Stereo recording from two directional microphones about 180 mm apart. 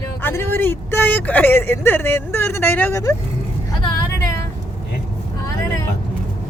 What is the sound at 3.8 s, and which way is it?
Vehicle, 25° left (ahead or behind).